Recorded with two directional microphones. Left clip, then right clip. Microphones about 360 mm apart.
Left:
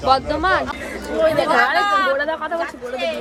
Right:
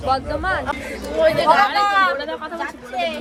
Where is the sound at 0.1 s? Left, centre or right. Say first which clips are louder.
Left 4 dB; left.